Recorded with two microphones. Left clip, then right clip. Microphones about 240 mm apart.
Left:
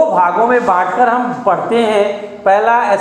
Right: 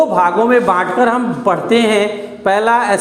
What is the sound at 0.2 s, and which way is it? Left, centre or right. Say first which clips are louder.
A man's voice: even; right.